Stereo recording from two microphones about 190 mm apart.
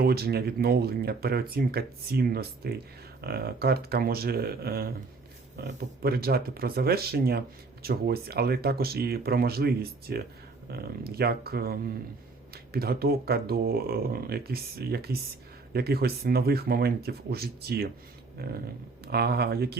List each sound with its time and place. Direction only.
0.0 s speech: 55° right (ahead or behind)